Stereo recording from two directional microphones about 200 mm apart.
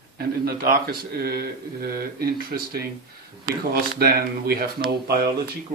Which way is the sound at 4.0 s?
50° right (ahead or behind).